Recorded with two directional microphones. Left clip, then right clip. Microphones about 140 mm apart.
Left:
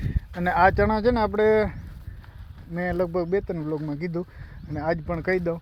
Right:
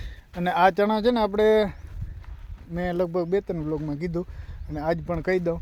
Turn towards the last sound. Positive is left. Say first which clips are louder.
# even
turn(degrees=-15)  # may be behind; listen again after turning